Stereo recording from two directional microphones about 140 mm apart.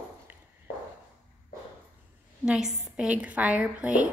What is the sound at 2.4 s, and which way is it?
A woman's voice, 5° right (ahead or behind).